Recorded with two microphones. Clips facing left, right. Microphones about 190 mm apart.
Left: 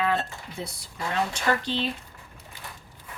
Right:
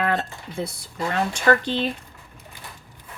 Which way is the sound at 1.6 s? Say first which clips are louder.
Right 4 dB; 55° right (ahead or behind).